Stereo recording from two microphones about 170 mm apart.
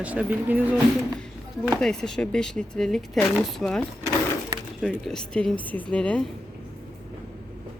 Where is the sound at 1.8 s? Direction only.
5° left (ahead or behind).